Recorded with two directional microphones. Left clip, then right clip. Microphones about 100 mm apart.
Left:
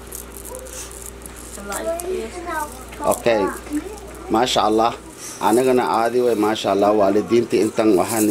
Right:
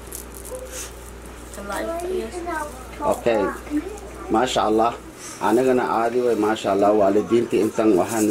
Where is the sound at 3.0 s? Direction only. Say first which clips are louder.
Left 2 dB; 45° left (ahead or behind).